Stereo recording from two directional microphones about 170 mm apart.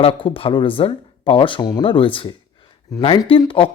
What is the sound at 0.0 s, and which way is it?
Speech, 30° left (ahead or behind).